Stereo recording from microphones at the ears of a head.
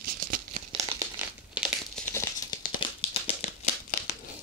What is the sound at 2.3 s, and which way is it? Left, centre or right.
Crumpling, left.